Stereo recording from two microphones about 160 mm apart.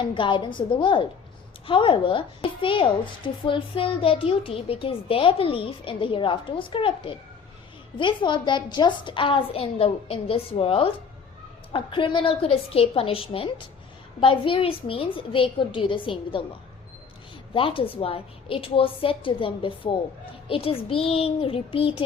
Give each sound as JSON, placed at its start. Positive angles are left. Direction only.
{"t": 0.0, "sound": "a woman's voice", "side_deg": 30}
{"t": 17.5, "sound": "a woman's voice", "side_deg": 35}